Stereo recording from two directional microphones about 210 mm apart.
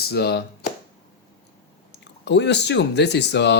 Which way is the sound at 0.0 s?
50° left (ahead or behind).